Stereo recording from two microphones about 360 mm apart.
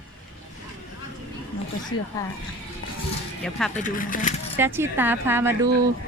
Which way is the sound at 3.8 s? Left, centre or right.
Left.